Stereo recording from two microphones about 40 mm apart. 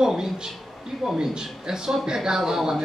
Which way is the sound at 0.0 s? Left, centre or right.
Centre.